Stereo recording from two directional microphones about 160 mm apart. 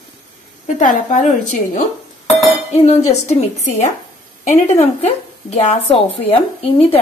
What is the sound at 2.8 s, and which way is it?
A woman's voice, 45° left (ahead or behind).